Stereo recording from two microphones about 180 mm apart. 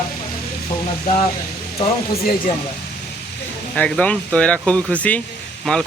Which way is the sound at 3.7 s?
5° left (ahead or behind).